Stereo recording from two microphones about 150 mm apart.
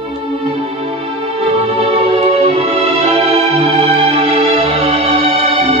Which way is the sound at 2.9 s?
45° right (ahead or behind).